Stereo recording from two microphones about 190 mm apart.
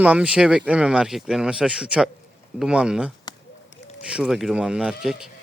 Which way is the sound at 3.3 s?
20° left (ahead or behind).